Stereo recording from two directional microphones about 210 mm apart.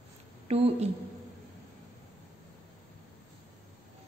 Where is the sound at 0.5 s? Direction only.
30° right (ahead or behind).